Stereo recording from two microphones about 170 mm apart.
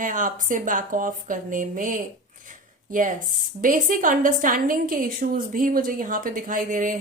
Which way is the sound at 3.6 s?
50° right (ahead or behind).